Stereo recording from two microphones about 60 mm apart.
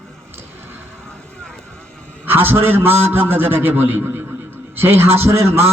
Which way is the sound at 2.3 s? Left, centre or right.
Right.